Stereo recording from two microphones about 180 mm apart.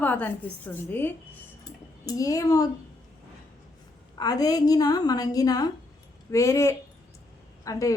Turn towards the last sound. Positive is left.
turn(degrees=15)  # may be behind; listen again after turning